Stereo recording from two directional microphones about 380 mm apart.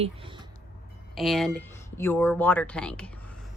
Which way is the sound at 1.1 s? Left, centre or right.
Centre.